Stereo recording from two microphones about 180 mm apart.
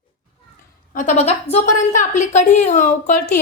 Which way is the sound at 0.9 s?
40° left (ahead or behind).